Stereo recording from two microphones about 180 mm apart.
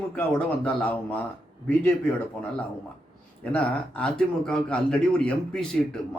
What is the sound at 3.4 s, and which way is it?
A man's voice, 5° left (ahead or behind).